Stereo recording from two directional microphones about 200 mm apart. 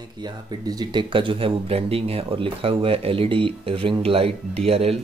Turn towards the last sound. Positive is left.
turn(degrees=-30)  # may be behind; listen again after turning